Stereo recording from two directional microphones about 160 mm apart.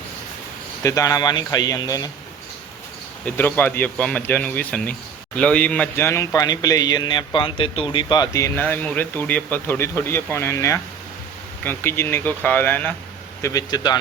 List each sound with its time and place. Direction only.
0.8 s speech: 20° left (ahead or behind)
3.2 s speech: 15° left (ahead or behind)
13.4 s speech: 20° left (ahead or behind)